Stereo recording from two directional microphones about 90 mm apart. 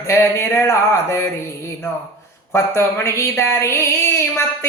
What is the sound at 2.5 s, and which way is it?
Speech, 30° left (ahead or behind).